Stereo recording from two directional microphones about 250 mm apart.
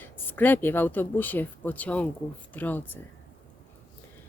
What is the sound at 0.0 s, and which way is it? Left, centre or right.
Speech, centre.